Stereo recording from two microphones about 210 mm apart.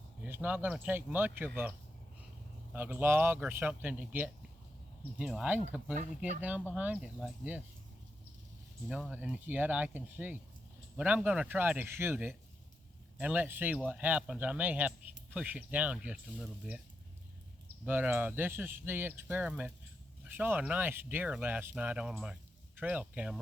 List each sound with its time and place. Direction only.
0.3 s speech: 10° right (ahead or behind)
2.7 s speech: 10° right (ahead or behind)
6.7 s speech: 5° right (ahead or behind)
8.9 s speech: 5° right (ahead or behind)
17.8 s speech: 10° right (ahead or behind)